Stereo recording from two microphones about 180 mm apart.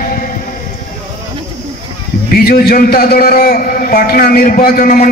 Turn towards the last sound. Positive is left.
turn(degrees=50)  # may be behind; listen again after turning